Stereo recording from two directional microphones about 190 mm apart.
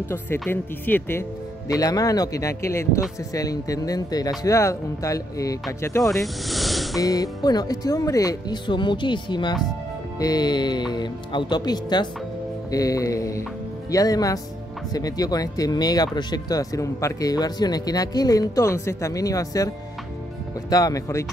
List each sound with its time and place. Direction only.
0.1 s speech: 10° left (ahead or behind)
6.0 s speech: centre (ahead or behind)
7.0 s speech: 20° left (ahead or behind)
20.7 s speech: 20° left (ahead or behind)